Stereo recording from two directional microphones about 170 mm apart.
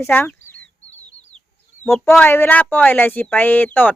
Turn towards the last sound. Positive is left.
turn(degrees=10)  # may be behind; listen again after turning